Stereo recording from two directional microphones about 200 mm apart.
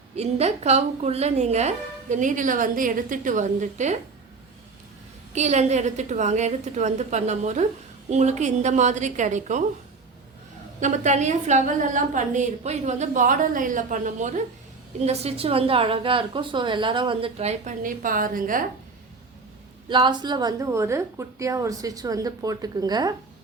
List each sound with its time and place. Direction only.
0.2 s speech: 30° right (ahead or behind)
5.3 s speech: 35° right (ahead or behind)
10.8 s a woman's voice: 35° right (ahead or behind)
19.9 s a woman's voice: 20° right (ahead or behind)